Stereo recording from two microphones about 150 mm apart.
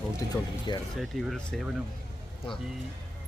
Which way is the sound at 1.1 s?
70° right (ahead or behind).